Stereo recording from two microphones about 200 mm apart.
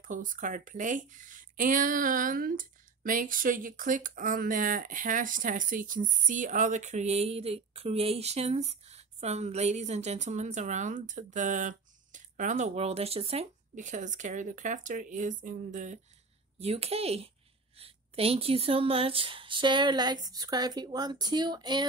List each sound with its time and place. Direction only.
0.0 s speech: 40° right (ahead or behind); by 21.8 s 20° right (ahead or behind)